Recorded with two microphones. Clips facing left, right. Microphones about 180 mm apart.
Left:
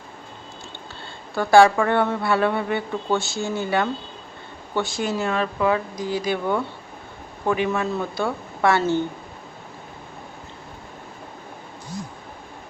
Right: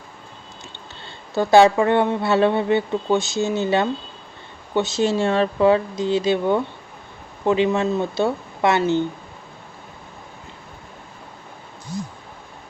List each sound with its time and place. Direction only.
1.3 s speech: 20° right (ahead or behind)